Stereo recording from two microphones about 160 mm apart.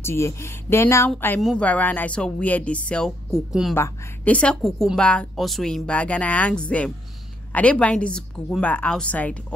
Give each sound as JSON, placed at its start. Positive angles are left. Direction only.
{"t": 0.0, "sound": "a woman's voice", "side_deg": 15}
{"t": 3.7, "sound": "a woman's voice", "side_deg": 10}